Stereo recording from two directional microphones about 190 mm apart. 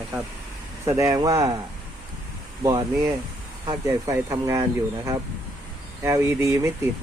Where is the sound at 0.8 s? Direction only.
15° right (ahead or behind).